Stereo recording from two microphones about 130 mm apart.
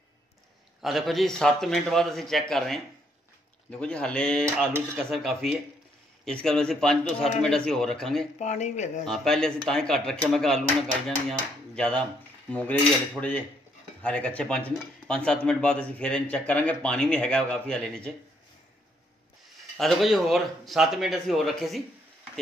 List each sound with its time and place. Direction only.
0.8 s a man's voice: centre (ahead or behind)
8.4 s speech: 65° left (ahead or behind)
9.0 s a man's voice: 5° left (ahead or behind)
19.8 s a man's voice: centre (ahead or behind)